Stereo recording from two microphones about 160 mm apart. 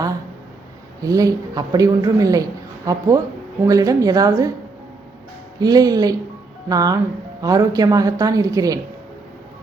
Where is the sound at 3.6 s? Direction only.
20° right (ahead or behind).